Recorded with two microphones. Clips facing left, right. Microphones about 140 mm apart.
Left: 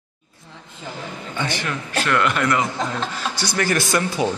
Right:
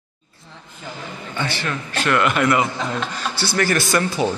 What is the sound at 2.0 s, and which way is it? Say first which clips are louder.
Speech: right 3 dB; 5° right (ahead or behind).